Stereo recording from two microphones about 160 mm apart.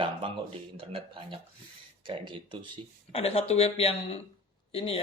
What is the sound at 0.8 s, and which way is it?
Speech, 35° right (ahead or behind).